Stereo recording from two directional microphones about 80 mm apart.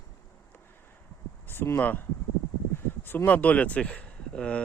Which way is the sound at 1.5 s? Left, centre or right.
Left.